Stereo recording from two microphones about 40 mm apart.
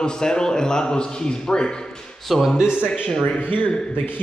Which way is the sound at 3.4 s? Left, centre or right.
Left.